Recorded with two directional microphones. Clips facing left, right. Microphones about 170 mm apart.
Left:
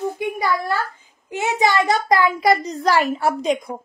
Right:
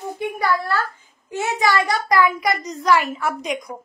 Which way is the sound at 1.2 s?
20° left (ahead or behind).